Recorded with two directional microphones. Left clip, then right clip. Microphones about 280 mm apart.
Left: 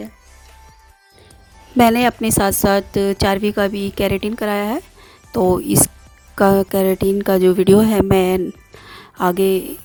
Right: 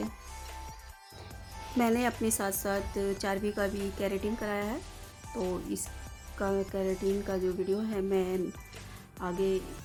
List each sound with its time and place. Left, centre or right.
1.8 s a woman's voice: left